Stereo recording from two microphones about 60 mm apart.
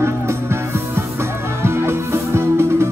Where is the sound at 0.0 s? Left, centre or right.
Right.